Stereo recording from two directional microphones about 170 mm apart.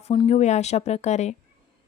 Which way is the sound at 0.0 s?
35° left (ahead or behind).